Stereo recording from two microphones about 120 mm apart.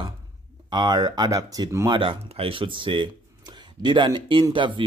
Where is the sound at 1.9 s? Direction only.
50° right (ahead or behind).